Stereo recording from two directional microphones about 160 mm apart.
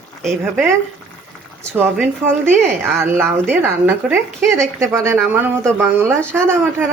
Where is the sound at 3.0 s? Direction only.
15° right (ahead or behind).